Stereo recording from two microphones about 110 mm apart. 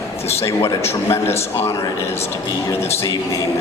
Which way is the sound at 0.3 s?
25° left (ahead or behind).